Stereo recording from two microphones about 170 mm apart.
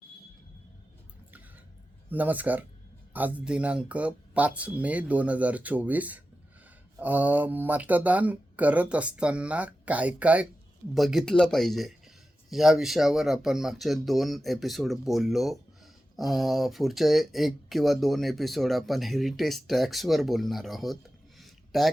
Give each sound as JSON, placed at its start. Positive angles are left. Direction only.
{"t": 2.0, "sound": "speech", "side_deg": -10}